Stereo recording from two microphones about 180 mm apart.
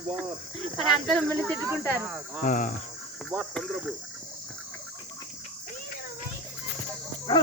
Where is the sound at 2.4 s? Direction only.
45° left (ahead or behind).